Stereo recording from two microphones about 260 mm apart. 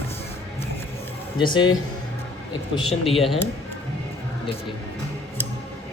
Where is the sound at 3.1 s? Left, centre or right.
Centre.